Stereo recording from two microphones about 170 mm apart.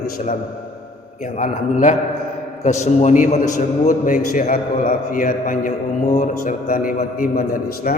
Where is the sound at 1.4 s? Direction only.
45° left (ahead or behind).